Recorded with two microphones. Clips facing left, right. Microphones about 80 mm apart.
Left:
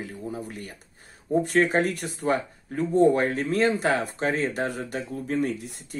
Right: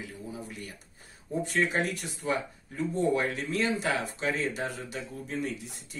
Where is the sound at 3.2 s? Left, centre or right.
Left.